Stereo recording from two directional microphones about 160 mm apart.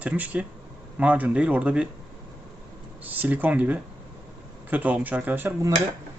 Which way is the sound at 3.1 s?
10° right (ahead or behind).